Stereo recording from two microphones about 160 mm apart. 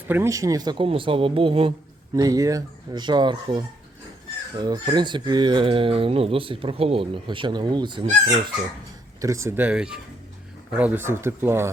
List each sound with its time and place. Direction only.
0.1 s speech: 20° right (ahead or behind); by 1.7 s 35° right (ahead or behind)
2.1 s speech: 25° right (ahead or behind)
4.6 s speech: 25° right (ahead or behind)
9.2 s speech: 20° right (ahead or behind)